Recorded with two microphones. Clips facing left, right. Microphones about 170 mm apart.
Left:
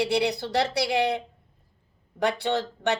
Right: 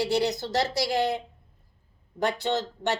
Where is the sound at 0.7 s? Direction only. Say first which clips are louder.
Left 1 dB; 70° left (ahead or behind).